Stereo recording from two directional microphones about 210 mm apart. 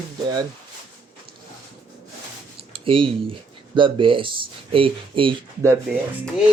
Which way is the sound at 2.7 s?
25° right (ahead or behind).